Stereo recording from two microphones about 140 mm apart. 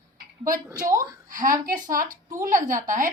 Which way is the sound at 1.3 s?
75° right (ahead or behind).